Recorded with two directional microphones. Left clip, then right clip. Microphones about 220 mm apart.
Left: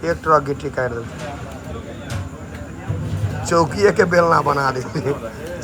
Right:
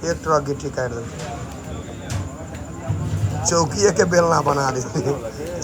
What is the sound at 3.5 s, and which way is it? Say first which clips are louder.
Speech: left 3 dB; 10° right (ahead or behind).